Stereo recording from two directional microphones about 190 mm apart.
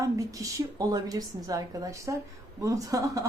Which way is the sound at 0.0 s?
15° right (ahead or behind).